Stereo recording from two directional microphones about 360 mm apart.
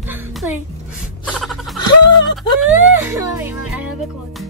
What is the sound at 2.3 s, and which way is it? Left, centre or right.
Whimper, centre.